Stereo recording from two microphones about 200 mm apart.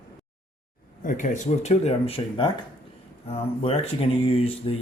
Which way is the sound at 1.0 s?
40° left (ahead or behind).